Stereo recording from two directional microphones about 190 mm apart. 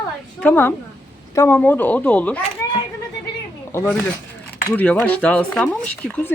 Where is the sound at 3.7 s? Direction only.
15° left (ahead or behind).